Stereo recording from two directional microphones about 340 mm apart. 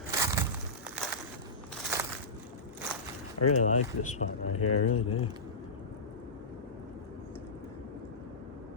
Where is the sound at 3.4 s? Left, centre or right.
Left.